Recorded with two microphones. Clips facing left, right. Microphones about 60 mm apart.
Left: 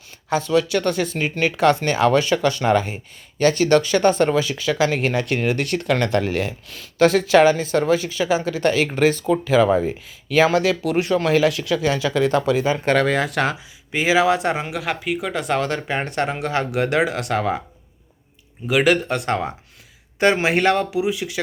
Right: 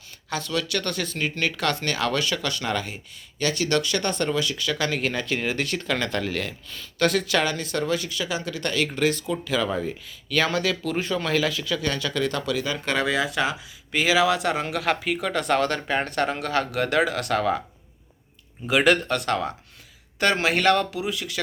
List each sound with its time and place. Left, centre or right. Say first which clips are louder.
0.3 s speech: left 8 dB; left
5.7 s speech: left 6 dB; centre
6.1 s speech: left 6 dB; left
9.8 s speech: left 6 dB; left
12.9 s speech: left 4 dB; left
13.9 s speech: left 3 dB; left
14.6 s speech: even; centre
18.7 s speech: left 2 dB; centre
19.0 s speech: left 2 dB; left